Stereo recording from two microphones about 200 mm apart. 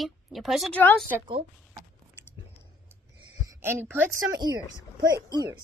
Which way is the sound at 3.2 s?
15° right (ahead or behind).